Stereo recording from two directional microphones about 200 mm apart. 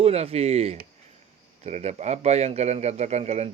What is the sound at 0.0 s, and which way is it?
A man's voice, 30° right (ahead or behind).